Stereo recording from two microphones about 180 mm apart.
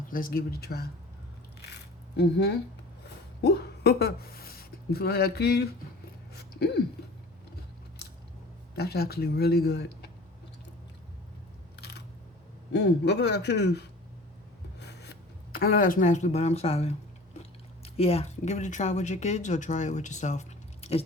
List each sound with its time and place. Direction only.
0.1 s speech: 50° left (ahead or behind)
2.1 s a man's voice: 70° left (ahead or behind)
6.3 s a sound: 60° left (ahead or behind)
8.7 s speech: 60° left (ahead or behind)
11.8 s single-lens reflex camera: 70° left (ahead or behind)
12.7 s a man's voice: 70° left (ahead or behind); by 21.0 s 35° left (ahead or behind)